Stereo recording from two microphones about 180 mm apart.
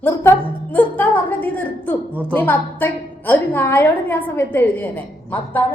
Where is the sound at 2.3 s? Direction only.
10° left (ahead or behind).